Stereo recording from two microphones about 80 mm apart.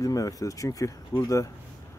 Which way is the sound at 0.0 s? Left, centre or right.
Left.